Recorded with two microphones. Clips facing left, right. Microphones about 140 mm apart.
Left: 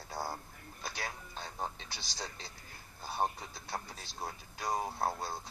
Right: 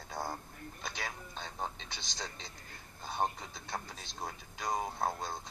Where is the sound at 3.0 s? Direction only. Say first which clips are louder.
Even; 5° left (ahead or behind).